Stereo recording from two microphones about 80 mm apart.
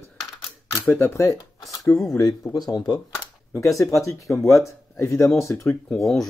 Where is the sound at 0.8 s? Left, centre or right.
Left.